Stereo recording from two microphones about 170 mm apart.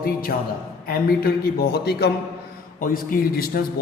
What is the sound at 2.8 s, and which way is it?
Speech, 55° left (ahead or behind).